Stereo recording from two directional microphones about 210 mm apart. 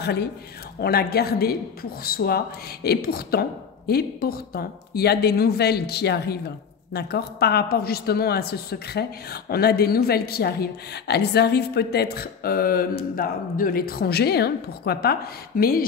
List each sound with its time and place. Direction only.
0.0 s speech: 50° left (ahead or behind)